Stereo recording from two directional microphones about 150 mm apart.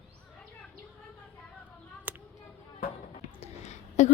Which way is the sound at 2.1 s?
10° right (ahead or behind).